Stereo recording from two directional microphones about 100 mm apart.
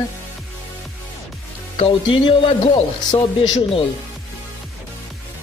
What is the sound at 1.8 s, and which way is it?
Speech, 70° left (ahead or behind).